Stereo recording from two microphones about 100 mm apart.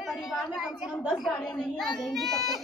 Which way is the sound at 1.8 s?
Centre (ahead or behind).